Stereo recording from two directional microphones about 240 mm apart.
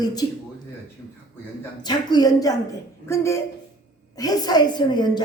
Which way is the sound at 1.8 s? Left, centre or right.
Centre.